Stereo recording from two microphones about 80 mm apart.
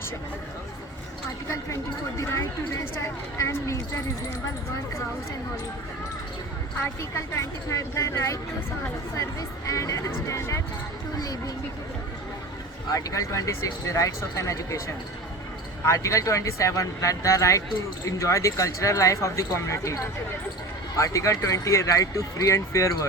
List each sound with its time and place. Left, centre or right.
2.2 s speech: left
7.3 s speech: left
9.6 s speech: left
11.2 s speech: left
12.9 s speech: left